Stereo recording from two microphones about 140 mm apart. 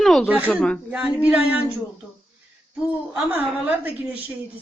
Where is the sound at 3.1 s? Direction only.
10° right (ahead or behind).